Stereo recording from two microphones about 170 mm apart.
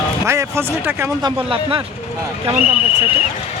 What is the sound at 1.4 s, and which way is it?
Speech, 30° right (ahead or behind).